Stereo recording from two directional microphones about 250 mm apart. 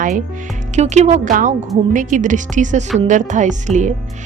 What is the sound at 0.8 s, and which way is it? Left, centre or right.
A woman's voice, right.